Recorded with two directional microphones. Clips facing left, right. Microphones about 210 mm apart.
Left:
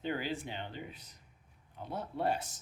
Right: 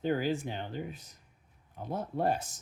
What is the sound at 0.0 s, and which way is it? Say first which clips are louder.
Speech: right 6 dB; 45° right (ahead or behind).